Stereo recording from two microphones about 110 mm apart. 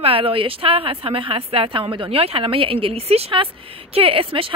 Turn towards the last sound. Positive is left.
turn(degrees=-55)  # may be behind; listen again after turning